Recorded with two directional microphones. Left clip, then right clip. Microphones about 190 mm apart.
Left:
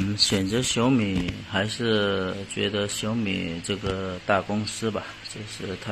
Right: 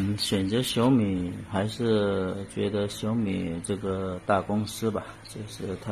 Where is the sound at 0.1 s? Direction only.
Centre (ahead or behind).